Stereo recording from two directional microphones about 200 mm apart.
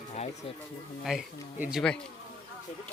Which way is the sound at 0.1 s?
30° left (ahead or behind).